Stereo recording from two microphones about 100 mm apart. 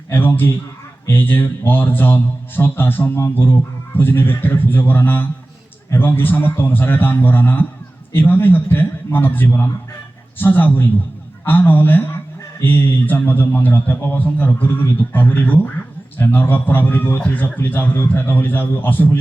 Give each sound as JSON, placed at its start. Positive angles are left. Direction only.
{"t": 0.1, "sound": "a man's voice", "side_deg": 20}